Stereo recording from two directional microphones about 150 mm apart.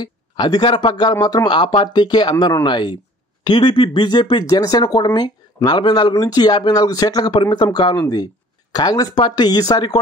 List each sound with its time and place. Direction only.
0.0 s speech: 30° left (ahead or behind)